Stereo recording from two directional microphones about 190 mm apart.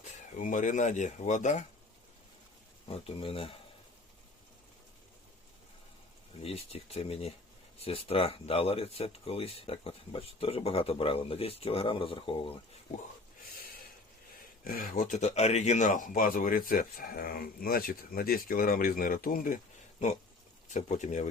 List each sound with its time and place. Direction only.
0.3 s speech: 40° left (ahead or behind)
2.8 s speech: 30° left (ahead or behind)
6.4 s speech: 30° left (ahead or behind)
14.6 s speech: 50° left (ahead or behind)
20.7 s speech: 40° left (ahead or behind)